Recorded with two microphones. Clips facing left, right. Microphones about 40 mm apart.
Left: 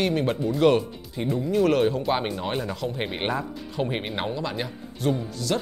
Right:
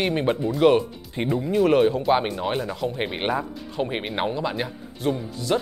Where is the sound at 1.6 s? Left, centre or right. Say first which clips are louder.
Right 3 dB; centre.